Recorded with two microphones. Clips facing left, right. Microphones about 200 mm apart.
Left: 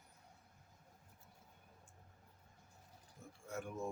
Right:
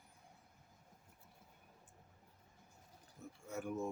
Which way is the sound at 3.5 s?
5° right (ahead or behind).